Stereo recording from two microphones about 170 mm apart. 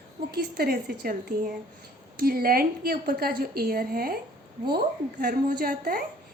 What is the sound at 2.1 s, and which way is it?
A woman's voice, 60° right (ahead or behind).